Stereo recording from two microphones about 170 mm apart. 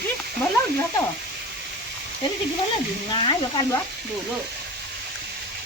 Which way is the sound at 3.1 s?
25° left (ahead or behind).